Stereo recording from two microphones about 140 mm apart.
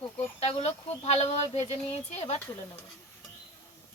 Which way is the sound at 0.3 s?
50° left (ahead or behind).